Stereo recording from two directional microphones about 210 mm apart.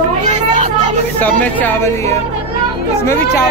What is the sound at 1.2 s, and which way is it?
Speech, 10° left (ahead or behind).